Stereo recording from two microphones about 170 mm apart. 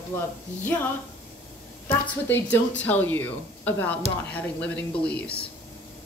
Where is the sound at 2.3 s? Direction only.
10° left (ahead or behind).